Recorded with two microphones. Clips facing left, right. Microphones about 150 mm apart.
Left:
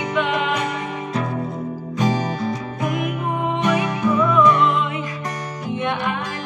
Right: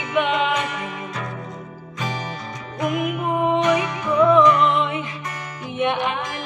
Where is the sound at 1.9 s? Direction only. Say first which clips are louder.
Left 8 dB; 40° left (ahead or behind).